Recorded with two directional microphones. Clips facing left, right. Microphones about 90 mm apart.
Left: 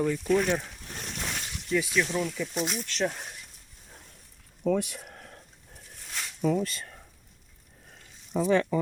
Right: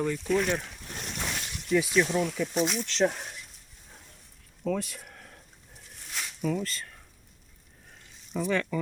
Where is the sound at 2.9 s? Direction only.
25° right (ahead or behind).